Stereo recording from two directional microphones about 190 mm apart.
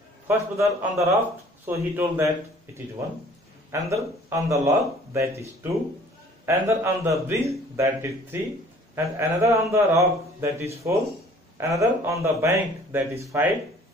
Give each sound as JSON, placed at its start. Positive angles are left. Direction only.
{"t": 0.3, "sound": "a man's voice", "side_deg": -15}
{"t": 3.7, "sound": "a man's voice", "side_deg": -15}